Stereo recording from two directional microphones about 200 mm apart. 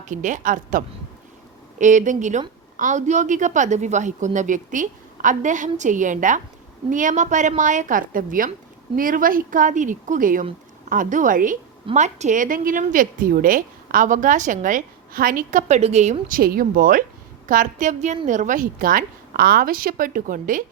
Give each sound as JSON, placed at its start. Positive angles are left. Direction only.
{"t": 0.1, "sound": "speech", "side_deg": -40}
{"t": 16.4, "sound": "a woman's voice", "side_deg": -45}